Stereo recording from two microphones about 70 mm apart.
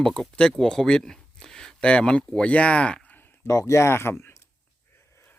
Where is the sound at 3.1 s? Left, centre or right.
Left.